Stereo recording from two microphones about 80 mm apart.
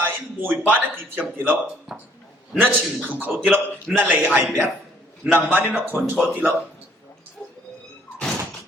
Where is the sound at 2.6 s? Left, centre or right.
Right.